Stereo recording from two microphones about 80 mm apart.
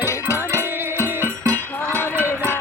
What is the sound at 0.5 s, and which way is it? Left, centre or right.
Music, right.